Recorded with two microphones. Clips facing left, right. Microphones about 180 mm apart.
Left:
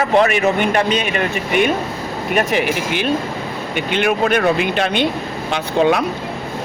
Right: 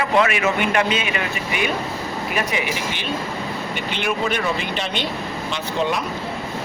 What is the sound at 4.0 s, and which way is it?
Speech, 55° left (ahead or behind).